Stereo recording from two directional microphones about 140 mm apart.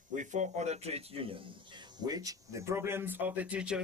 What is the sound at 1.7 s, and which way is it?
Speech, 30° right (ahead or behind).